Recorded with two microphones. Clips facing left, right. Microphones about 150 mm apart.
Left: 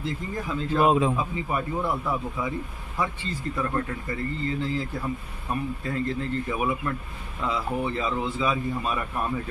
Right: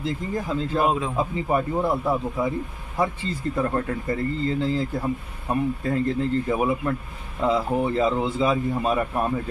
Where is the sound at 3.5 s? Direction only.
25° right (ahead or behind).